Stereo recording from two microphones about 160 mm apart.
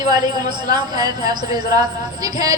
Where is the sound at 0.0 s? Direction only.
25° right (ahead or behind).